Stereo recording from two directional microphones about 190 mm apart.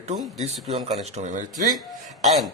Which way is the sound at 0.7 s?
35° right (ahead or behind).